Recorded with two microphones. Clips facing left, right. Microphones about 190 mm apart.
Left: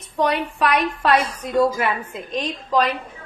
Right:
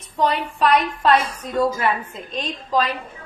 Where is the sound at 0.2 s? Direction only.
65° left (ahead or behind).